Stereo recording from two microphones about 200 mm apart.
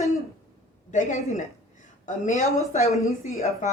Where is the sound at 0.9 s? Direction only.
40° left (ahead or behind).